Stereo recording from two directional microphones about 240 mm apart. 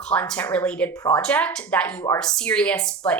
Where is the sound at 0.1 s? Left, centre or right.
Centre.